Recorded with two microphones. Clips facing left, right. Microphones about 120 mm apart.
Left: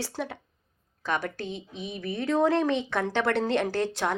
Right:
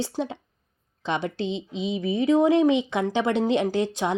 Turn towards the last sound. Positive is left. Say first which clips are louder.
# right 3 dB
turn(degrees=-15)  # may be behind; listen again after turning